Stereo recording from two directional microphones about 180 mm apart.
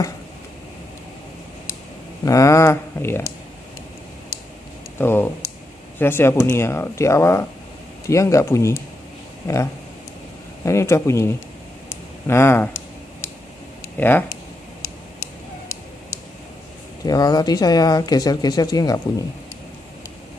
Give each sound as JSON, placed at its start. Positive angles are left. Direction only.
{"t": 2.2, "sound": "speech", "side_deg": 15}
{"t": 4.9, "sound": "speech", "side_deg": 10}
{"t": 11.9, "sound": "a sound", "side_deg": 15}
{"t": 13.9, "sound": "speech", "side_deg": 10}
{"t": 17.0, "sound": "speech", "side_deg": 20}